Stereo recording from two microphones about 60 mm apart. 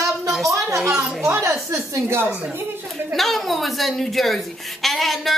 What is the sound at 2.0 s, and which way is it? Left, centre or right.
Speech, right.